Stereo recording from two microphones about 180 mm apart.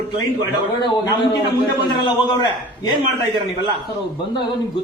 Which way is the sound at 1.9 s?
25° left (ahead or behind).